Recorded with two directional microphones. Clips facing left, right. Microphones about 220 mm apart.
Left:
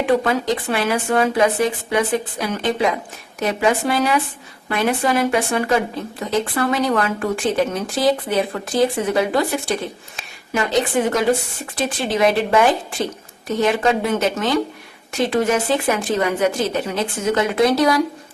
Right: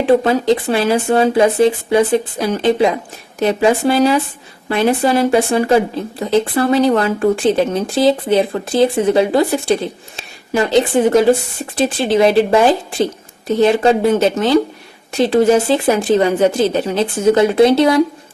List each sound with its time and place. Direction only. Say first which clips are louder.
0.0 s a woman's voice: right 5 dB; 30° right (ahead or behind)